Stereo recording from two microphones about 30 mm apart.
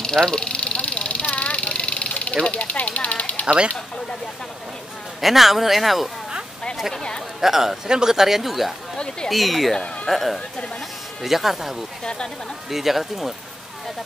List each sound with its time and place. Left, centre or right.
0.0 s vehicle: left
2.4 s speech: left
5.2 s speech: centre
7.3 s speech: centre
8.9 s speech: left
9.3 s speech: centre
12.0 s speech: left
12.6 s speech: centre